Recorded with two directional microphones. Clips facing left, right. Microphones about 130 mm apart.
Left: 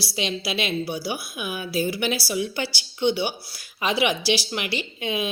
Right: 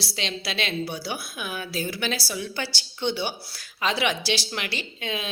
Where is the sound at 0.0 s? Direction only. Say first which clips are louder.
Left 4 dB; 10° left (ahead or behind).